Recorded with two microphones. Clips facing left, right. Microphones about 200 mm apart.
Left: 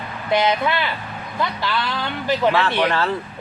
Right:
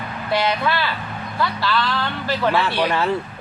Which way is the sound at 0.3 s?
20° left (ahead or behind).